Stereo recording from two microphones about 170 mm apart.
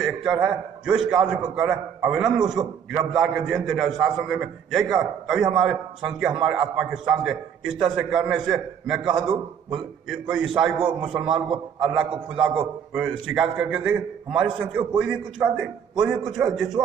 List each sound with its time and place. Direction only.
0.0 s a man's voice: centre (ahead or behind)